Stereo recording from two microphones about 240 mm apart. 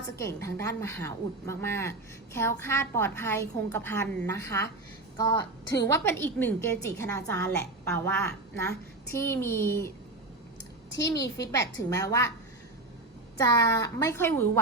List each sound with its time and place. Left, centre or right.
0.2 s speech: centre
10.9 s speech: centre
13.3 s speech: centre